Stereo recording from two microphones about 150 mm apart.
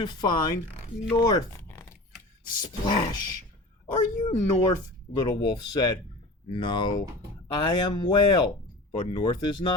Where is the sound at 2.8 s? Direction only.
30° left (ahead or behind).